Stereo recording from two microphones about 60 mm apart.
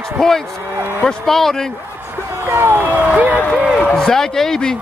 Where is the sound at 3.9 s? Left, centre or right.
Centre.